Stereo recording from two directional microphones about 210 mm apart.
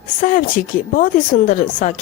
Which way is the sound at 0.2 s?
40° left (ahead or behind).